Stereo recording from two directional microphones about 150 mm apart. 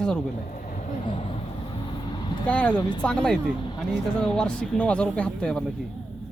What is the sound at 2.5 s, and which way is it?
Speech, 10° left (ahead or behind).